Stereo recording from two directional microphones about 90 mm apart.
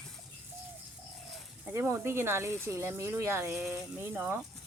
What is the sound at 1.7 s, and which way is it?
Speech, 30° right (ahead or behind).